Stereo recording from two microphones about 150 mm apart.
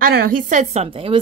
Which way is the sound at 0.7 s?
40° right (ahead or behind).